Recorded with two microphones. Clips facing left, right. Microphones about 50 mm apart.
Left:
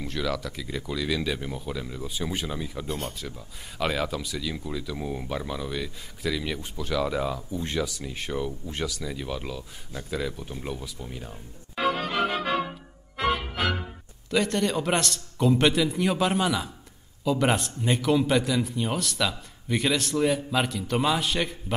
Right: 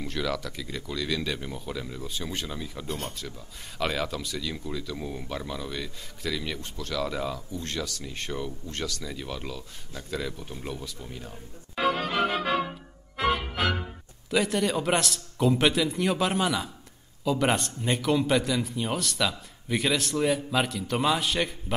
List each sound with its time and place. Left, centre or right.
0.0 s a man's voice: centre